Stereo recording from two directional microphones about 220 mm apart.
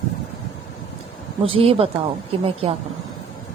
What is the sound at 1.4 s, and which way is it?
A woman's voice, 25° right (ahead or behind).